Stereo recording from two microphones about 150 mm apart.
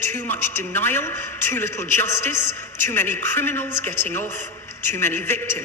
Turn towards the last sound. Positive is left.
turn(degrees=15)  # may be behind; listen again after turning